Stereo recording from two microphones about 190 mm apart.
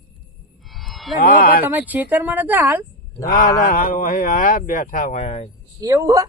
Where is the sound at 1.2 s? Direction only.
50° left (ahead or behind).